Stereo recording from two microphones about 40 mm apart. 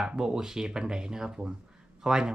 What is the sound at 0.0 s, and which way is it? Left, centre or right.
Speech, centre.